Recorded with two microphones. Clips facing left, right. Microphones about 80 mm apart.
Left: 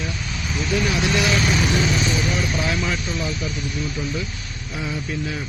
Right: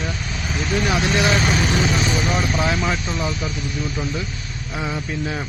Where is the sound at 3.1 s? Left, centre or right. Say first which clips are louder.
Right 2 dB; right.